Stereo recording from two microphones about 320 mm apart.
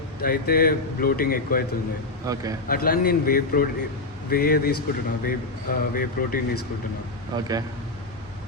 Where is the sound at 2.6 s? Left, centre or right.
Left.